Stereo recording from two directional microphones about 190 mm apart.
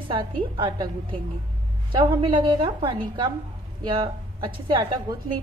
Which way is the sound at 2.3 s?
25° right (ahead or behind).